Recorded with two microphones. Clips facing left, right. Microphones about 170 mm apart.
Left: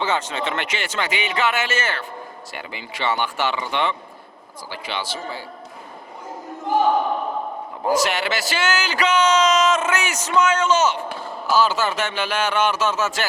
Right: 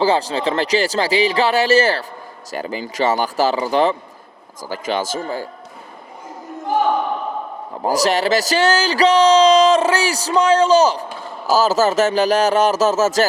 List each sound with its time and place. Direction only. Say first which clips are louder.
0.0 s speech: right 7 dB; 35° right (ahead or behind)
7.9 s speech: right 4 dB; 35° right (ahead or behind)